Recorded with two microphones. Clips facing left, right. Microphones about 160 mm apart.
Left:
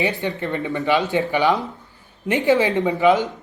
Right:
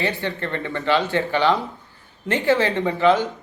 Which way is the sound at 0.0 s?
20° left (ahead or behind).